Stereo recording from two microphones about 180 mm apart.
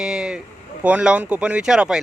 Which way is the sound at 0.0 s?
5° right (ahead or behind).